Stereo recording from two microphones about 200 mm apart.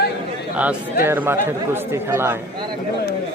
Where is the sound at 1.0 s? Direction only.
10° right (ahead or behind).